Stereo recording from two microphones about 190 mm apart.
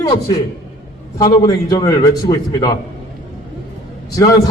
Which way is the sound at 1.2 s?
20° left (ahead or behind).